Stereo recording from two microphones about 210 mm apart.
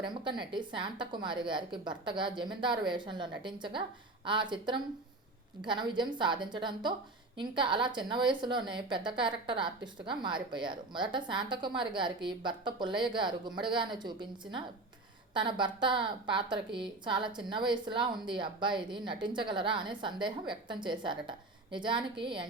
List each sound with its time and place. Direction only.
0.0 s a woman's voice: 20° right (ahead or behind)